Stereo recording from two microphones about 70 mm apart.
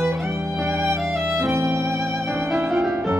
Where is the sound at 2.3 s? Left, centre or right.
Right.